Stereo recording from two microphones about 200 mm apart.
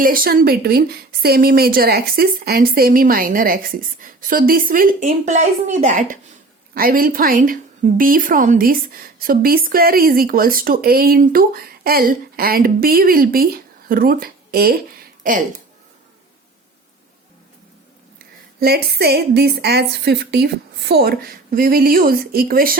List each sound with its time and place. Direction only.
0.0 s a woman's voice: 45° right (ahead or behind)
18.6 s a woman's voice: 50° right (ahead or behind)